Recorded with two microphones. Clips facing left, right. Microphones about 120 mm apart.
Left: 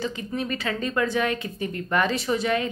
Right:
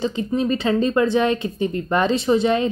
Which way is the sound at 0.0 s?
25° right (ahead or behind).